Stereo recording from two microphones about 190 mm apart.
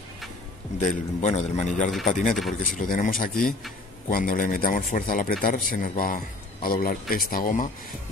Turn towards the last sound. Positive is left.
turn(degrees=45)  # may be behind; listen again after turning